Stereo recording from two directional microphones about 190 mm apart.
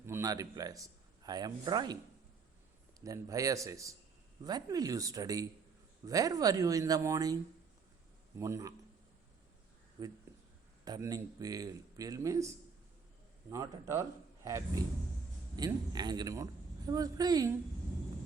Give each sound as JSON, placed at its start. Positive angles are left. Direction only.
{"t": 0.0, "sound": "a man's voice", "side_deg": -15}
{"t": 3.0, "sound": "speech", "side_deg": -15}
{"t": 8.4, "sound": "speech", "side_deg": -15}
{"t": 10.0, "sound": "speech", "side_deg": -20}
{"t": 13.5, "sound": "a man's voice", "side_deg": -15}